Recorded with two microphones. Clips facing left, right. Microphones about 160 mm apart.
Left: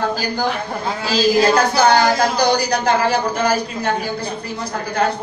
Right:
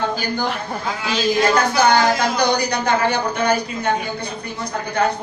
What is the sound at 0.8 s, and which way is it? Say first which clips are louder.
Speech: left 3 dB; 30° left (ahead or behind).